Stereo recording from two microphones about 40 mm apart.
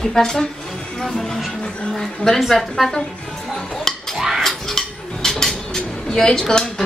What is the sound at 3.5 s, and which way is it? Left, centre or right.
Cutlery, centre.